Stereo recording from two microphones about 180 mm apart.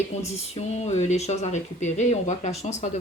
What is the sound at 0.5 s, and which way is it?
Speech, 40° left (ahead or behind).